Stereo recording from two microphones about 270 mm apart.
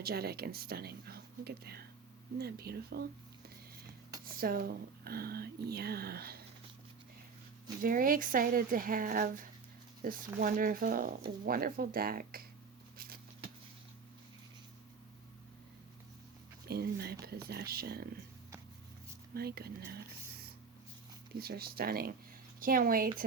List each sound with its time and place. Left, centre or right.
0.0 s speech: right
4.3 s speech: right
7.8 s speech: right
16.6 s speech: right
19.3 s speech: right
21.3 s speech: right